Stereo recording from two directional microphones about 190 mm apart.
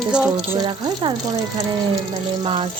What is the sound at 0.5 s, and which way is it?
Speech, 20° right (ahead or behind).